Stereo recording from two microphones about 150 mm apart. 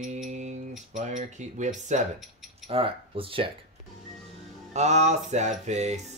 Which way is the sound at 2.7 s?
35° right (ahead or behind).